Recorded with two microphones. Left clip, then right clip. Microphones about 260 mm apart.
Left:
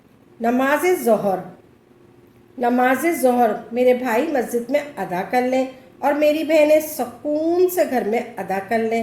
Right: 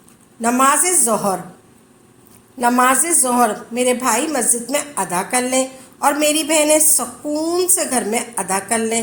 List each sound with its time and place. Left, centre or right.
0.4 s a woman's voice: right
2.6 s a woman's voice: right